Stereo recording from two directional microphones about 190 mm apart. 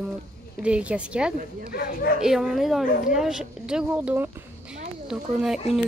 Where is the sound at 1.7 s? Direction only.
55° left (ahead or behind).